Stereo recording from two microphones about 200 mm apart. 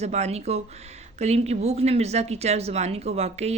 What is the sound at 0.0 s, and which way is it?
Speech, 35° right (ahead or behind).